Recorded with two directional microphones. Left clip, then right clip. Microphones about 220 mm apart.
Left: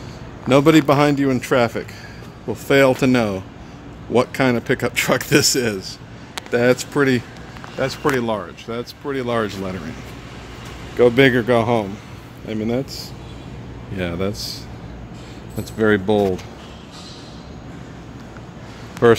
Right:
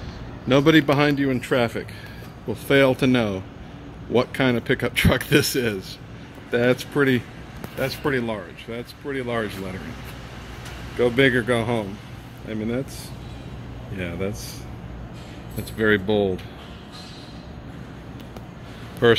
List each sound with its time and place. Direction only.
0.5 s speech: 10° left (ahead or behind)
11.0 s speech: 20° left (ahead or behind)
13.9 s speech: 25° left (ahead or behind)
15.8 s speech: 15° left (ahead or behind)
19.0 s speech: 15° left (ahead or behind)